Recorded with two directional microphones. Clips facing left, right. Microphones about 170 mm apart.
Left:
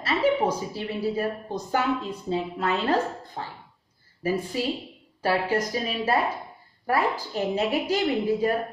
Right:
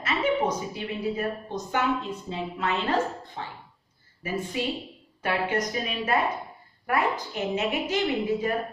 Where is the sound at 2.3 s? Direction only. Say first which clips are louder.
Left 4 dB; 40° left (ahead or behind).